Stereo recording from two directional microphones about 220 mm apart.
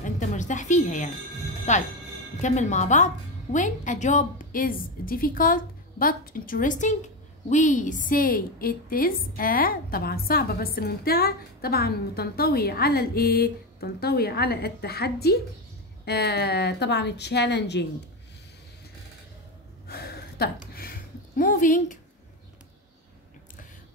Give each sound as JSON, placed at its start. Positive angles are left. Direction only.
{"t": 0.0, "sound": "music", "side_deg": 35}
{"t": 1.7, "sound": "a woman's voice", "side_deg": 35}
{"t": 19.9, "sound": "a sound", "side_deg": 45}